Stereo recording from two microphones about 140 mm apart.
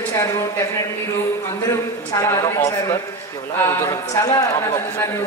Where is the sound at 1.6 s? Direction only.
20° left (ahead or behind).